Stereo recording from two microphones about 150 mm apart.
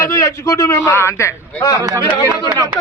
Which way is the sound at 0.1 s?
20° left (ahead or behind).